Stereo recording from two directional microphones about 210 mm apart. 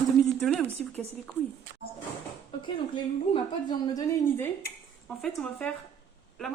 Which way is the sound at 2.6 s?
20° left (ahead or behind).